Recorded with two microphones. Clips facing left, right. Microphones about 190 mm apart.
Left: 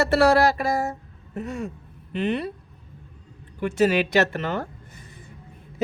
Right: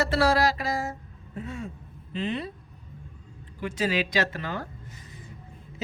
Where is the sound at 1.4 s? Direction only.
75° left (ahead or behind).